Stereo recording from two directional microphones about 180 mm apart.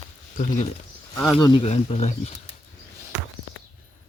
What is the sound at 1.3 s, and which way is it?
Speech, 25° left (ahead or behind).